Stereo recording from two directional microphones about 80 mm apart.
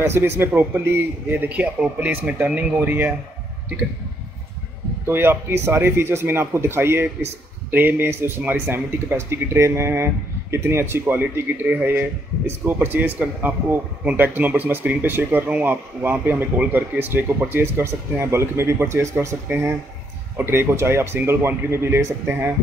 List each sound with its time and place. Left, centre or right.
0.0 s speech: right
5.0 s speech: right